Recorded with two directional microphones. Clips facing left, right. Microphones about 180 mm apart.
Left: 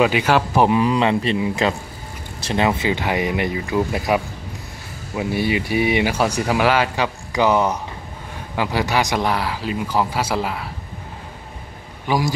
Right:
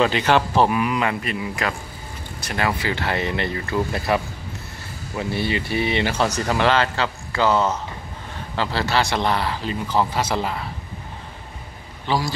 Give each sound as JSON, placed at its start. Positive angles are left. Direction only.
{"t": 0.0, "sound": "speech", "side_deg": 10}
{"t": 0.7, "sound": "a man's voice", "side_deg": 30}
{"t": 12.1, "sound": "speech", "side_deg": 10}